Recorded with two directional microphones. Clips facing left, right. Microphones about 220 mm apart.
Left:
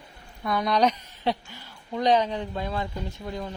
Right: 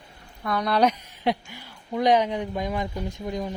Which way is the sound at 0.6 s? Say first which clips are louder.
Right 1 dB; 5° right (ahead or behind).